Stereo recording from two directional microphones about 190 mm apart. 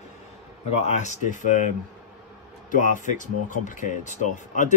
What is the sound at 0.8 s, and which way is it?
Speech, 35° left (ahead or behind).